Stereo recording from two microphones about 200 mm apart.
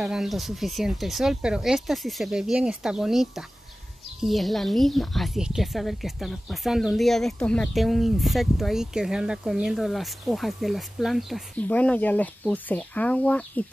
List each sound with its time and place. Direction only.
0.0 s a woman's voice: centre (ahead or behind)